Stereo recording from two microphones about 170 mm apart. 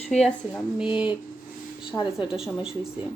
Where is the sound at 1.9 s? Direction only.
25° left (ahead or behind).